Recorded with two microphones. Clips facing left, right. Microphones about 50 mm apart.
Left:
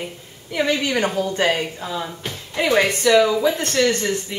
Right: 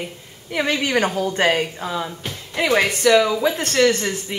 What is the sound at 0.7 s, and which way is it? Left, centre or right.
Speech, right.